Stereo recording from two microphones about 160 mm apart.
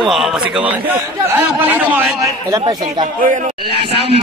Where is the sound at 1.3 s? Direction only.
10° right (ahead or behind).